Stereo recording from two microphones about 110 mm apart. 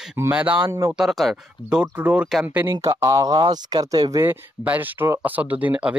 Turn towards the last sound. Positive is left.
turn(degrees=-10)  # may be behind; listen again after turning